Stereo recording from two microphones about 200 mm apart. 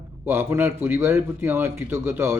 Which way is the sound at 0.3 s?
10° right (ahead or behind).